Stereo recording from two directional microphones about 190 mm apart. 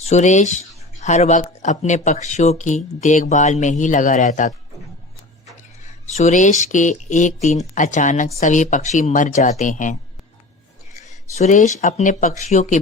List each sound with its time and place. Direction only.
0.0 s speech: 35° left (ahead or behind)
6.1 s speech: 40° left (ahead or behind)